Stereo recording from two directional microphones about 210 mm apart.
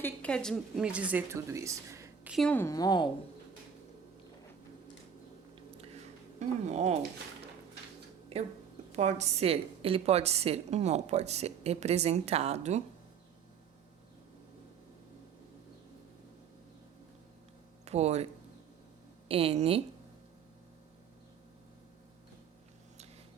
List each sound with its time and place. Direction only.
0.0 s a woman's voice: 5° left (ahead or behind); by 2.3 s 15° right (ahead or behind)
2.3 s a woman's voice: 5° left (ahead or behind)
6.7 s a woman's voice: 30° right (ahead or behind)
8.3 s a woman's voice: 30° right (ahead or behind)
17.8 s speech: 30° right (ahead or behind)
19.3 s speech: 25° right (ahead or behind)